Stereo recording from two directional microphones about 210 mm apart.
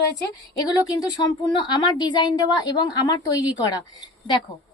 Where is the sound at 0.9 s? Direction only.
20° left (ahead or behind).